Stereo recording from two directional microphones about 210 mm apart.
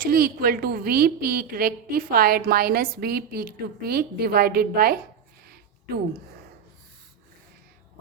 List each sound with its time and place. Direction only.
0.0 s a woman's voice: 45° right (ahead or behind)